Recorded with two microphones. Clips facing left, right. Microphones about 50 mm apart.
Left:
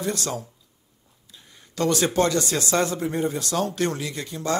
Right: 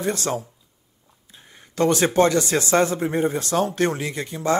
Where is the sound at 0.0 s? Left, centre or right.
Right.